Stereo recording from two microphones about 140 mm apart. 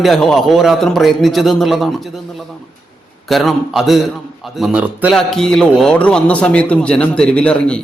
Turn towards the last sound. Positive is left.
turn(degrees=10)  # may be behind; listen again after turning